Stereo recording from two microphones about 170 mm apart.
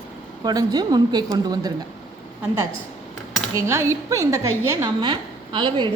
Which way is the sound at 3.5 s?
15° right (ahead or behind).